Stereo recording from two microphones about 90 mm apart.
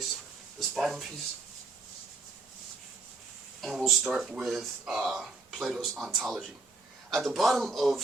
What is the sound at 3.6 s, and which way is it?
Speech, centre (ahead or behind).